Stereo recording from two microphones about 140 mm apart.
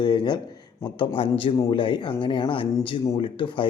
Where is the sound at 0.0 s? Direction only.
30° left (ahead or behind).